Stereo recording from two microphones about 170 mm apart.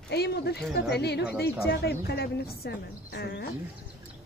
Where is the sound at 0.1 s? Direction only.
70° left (ahead or behind).